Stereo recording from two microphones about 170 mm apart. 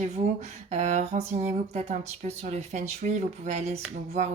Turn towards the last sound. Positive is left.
turn(degrees=-45)  # may be behind; listen again after turning